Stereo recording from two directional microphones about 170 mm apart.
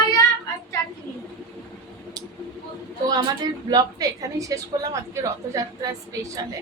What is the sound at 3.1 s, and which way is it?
A woman's voice, 25° right (ahead or behind).